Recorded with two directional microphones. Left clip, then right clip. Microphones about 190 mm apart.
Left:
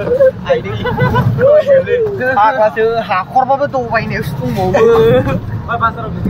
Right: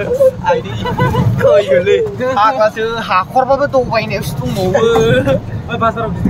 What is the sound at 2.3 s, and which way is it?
Speech, 25° right (ahead or behind).